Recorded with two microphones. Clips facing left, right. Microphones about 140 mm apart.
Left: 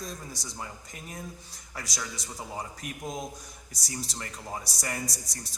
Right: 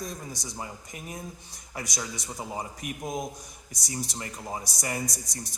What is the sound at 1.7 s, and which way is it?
A man's voice, 20° right (ahead or behind).